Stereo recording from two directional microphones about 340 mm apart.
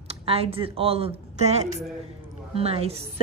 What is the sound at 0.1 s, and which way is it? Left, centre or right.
Speech, centre.